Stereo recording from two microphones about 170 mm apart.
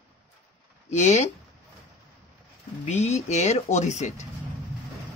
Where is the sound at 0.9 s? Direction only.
40° left (ahead or behind).